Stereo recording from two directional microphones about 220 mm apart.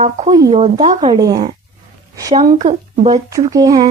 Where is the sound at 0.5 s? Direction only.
30° right (ahead or behind).